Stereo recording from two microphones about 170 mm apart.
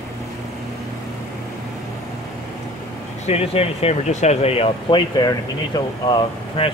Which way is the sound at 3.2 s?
35° left (ahead or behind).